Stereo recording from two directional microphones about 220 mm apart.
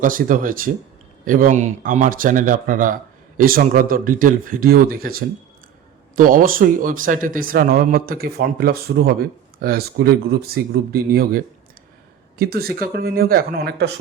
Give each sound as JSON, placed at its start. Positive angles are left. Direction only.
{"t": 0.0, "sound": "a man's voice", "side_deg": -40}
{"t": 6.1, "sound": "speech", "side_deg": -40}